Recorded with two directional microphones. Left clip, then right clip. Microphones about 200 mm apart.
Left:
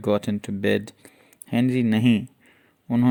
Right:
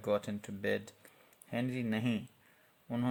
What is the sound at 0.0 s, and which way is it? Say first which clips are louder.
Speech: left 10 dB; 40° left (ahead or behind).